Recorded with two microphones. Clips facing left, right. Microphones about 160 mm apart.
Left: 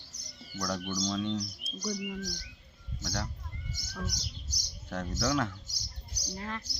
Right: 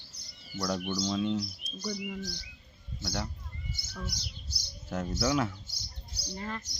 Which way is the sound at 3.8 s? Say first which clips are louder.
Left 3 dB; 45° left (ahead or behind).